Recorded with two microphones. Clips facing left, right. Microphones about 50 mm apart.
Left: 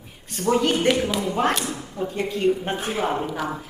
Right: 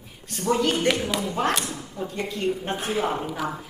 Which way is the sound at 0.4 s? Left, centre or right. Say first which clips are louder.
Left 2 dB; centre.